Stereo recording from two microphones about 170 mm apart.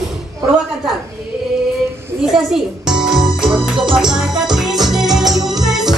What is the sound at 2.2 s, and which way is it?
Music, 5° right (ahead or behind).